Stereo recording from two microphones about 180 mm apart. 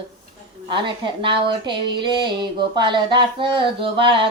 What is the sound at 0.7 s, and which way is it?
Speech, 25° right (ahead or behind).